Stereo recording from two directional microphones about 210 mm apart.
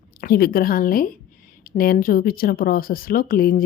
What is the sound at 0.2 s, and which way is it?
A woman's voice, 45° left (ahead or behind).